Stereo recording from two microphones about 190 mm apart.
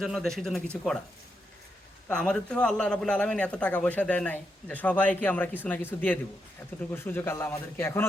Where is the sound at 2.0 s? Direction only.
5° left (ahead or behind).